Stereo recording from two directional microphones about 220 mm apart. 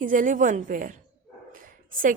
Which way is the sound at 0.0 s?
35° right (ahead or behind).